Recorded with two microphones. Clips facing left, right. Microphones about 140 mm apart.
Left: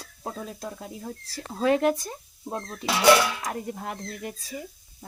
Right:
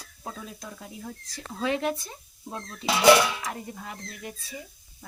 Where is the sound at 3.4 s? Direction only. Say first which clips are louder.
Left 4 dB; 50° left (ahead or behind).